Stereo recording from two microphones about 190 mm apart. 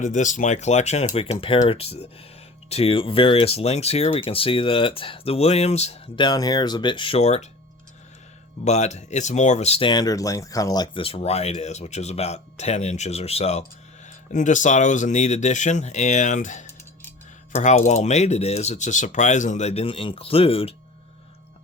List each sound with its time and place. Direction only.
0.0 s speech: 40° left (ahead or behind)
8.6 s speech: 35° left (ahead or behind)